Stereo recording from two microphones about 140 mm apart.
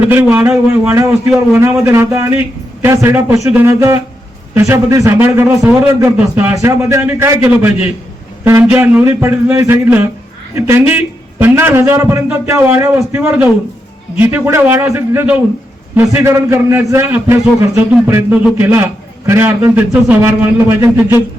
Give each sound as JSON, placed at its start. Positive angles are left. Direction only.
{"t": 0.0, "sound": "a man's voice", "side_deg": -15}
{"t": 6.1, "sound": "a man's voice", "side_deg": -10}
{"t": 6.6, "sound": "a man's voice", "side_deg": -20}